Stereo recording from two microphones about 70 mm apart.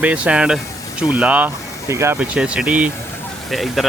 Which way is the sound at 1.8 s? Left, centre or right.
Right.